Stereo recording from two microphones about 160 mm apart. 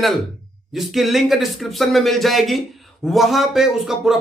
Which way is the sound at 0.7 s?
Centre (ahead or behind).